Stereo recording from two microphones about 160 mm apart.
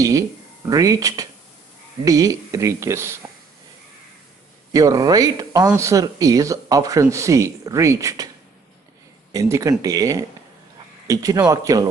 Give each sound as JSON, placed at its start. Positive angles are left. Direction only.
{"t": 0.7, "sound": "speech", "side_deg": -20}
{"t": 4.7, "sound": "speech", "side_deg": -20}
{"t": 9.3, "sound": "speech", "side_deg": -20}